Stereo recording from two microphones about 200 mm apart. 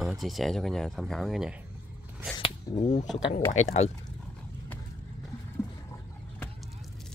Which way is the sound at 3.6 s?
90° left.